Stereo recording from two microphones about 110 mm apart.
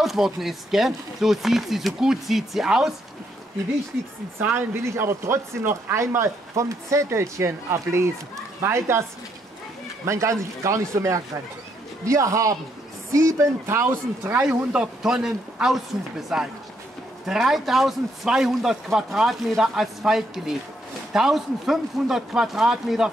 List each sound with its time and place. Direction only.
0.0 s speech: centre (ahead or behind)
4.4 s speech: 20° right (ahead or behind)
10.0 s speech: 25° right (ahead or behind); by 23.1 s 5° right (ahead or behind)